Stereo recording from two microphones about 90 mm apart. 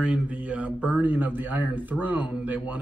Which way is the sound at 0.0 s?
15° right (ahead or behind).